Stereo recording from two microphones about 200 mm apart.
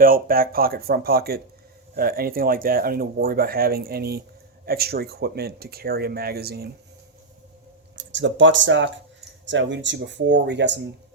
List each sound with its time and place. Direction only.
0.0 s speech: 45° right (ahead or behind)
7.9 s speech: 65° right (ahead or behind)